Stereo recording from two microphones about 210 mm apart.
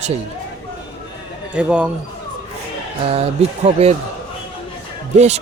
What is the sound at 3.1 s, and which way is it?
Speech, 30° right (ahead or behind).